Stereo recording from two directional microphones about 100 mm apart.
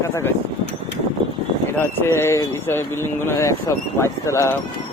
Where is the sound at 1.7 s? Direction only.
25° left (ahead or behind).